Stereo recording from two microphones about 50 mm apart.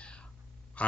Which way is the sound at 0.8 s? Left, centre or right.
Left.